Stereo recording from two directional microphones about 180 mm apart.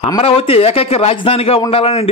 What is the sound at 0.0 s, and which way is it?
A man's voice, 30° left (ahead or behind).